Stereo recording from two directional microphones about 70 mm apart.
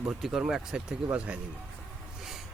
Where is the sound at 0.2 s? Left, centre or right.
Centre.